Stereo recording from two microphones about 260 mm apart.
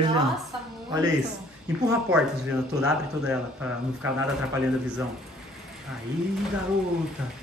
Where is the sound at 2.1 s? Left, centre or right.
Centre.